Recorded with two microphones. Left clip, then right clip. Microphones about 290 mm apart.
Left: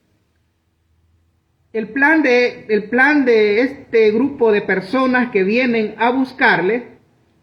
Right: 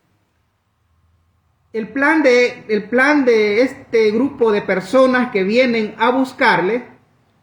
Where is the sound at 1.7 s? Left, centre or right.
Centre.